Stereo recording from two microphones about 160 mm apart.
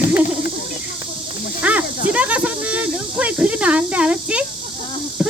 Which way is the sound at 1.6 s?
10° right (ahead or behind).